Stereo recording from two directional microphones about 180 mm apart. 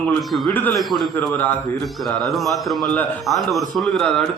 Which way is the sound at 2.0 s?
Centre (ahead or behind).